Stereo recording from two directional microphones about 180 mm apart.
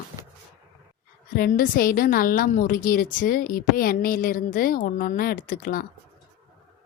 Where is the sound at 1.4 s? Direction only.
50° left (ahead or behind).